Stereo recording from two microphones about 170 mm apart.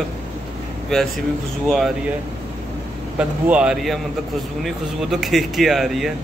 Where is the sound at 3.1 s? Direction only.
5° right (ahead or behind).